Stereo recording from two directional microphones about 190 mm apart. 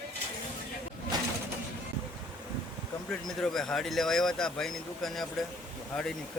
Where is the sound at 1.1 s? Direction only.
20° right (ahead or behind).